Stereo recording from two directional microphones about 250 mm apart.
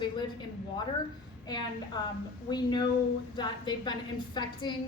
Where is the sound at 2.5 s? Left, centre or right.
Centre.